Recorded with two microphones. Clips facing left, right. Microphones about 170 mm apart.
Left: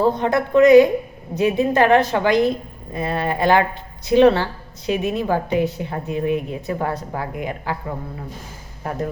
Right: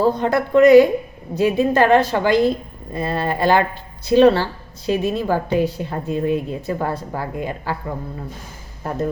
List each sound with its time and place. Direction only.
0.0 s a woman's voice: 20° left (ahead or behind)